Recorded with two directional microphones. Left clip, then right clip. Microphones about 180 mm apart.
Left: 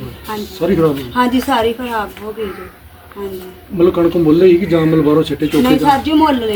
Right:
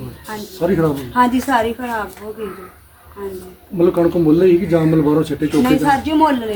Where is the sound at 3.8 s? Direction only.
Centre (ahead or behind).